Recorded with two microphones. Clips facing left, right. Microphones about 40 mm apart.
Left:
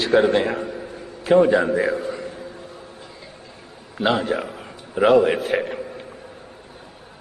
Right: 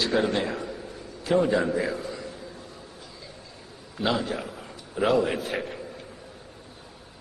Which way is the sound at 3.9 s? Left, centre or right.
Left.